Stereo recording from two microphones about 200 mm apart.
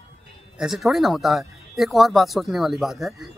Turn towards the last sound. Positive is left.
turn(degrees=0)  # may be behind; listen again after turning